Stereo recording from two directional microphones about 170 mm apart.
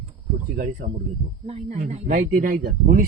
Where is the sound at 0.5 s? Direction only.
50° right (ahead or behind).